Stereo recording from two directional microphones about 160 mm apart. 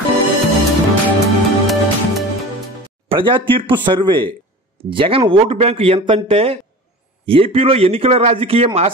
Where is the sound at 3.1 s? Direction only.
30° right (ahead or behind).